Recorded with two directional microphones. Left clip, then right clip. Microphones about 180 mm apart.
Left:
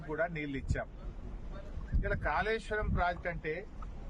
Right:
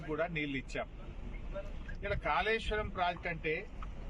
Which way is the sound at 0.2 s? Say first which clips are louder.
Left 2 dB; 10° left (ahead or behind).